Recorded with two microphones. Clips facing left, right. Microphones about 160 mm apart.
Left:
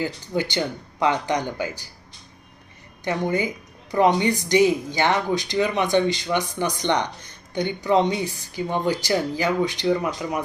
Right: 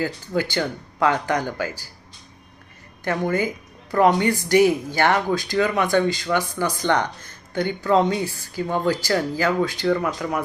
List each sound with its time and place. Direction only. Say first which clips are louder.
0.0 s speech: right 1 dB; 20° left (ahead or behind)
3.0 s a woman's voice: right 1 dB; 15° left (ahead or behind)